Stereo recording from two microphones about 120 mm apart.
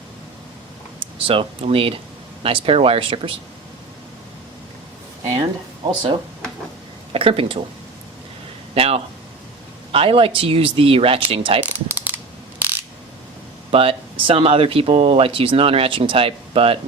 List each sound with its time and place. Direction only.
1.3 s speech: 50° right (ahead or behind)
5.2 s speech: 35° right (ahead or behind)
7.1 s speech: 50° right (ahead or behind)
8.7 s speech: 55° right (ahead or behind)
11.6 s mechanisms: 15° right (ahead or behind)
13.7 s speech: 50° right (ahead or behind)